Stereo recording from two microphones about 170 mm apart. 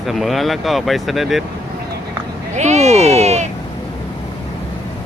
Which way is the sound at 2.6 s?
40° right (ahead or behind).